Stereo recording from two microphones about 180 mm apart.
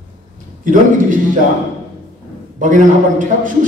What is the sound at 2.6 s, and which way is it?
Speech, 45° right (ahead or behind).